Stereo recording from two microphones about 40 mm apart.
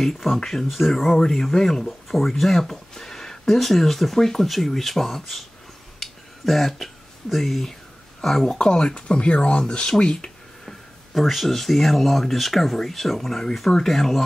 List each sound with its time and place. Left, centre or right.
0.0 s speech: centre
5.9 s a sound: centre
8.2 s speech: centre
8.5 s speech: centre
11.1 s speech: centre